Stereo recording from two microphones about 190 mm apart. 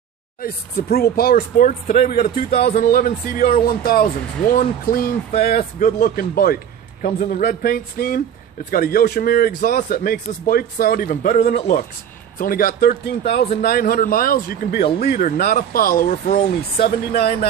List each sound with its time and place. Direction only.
0.4 s a man's voice: 50° left (ahead or behind)
5.5 s a man's voice: 40° left (ahead or behind); by 17.5 s 55° left (ahead or behind)